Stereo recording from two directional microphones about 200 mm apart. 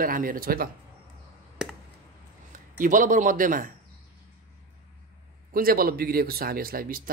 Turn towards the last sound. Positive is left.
turn(degrees=-45)  # may be behind; listen again after turning